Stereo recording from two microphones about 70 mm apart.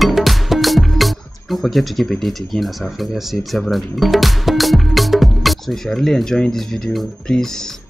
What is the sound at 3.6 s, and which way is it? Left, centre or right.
Speech, centre.